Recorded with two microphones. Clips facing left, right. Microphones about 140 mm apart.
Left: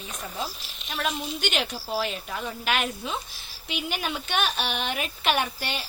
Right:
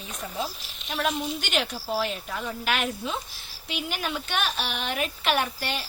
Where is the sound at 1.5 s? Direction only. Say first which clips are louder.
Right 3 dB; 10° left (ahead or behind).